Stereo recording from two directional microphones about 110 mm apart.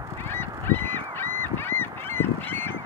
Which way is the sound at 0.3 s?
20° left (ahead or behind).